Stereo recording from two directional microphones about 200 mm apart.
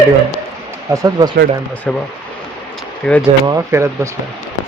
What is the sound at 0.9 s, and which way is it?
Speech, 20° right (ahead or behind).